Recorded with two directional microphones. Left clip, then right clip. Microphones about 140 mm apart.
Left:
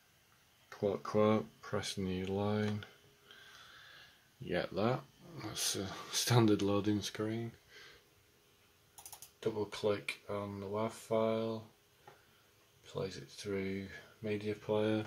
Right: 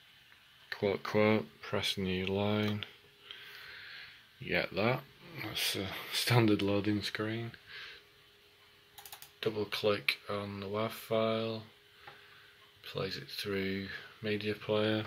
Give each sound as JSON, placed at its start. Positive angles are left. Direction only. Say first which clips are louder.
{"t": 0.7, "sound": "speech", "louder": "right 3 dB", "side_deg": 5}
{"t": 4.5, "sound": "speech", "louder": "right 3 dB", "side_deg": 20}
{"t": 9.7, "sound": "speech", "louder": "right 5 dB", "side_deg": 10}
{"t": 13.0, "sound": "speech", "louder": "right 5 dB", "side_deg": 10}